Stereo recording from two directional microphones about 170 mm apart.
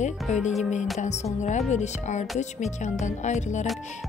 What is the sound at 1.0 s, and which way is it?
Music, 40° left (ahead or behind).